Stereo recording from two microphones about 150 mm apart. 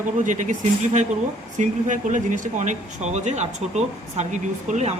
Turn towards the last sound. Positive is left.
turn(degrees=-50)  # may be behind; listen again after turning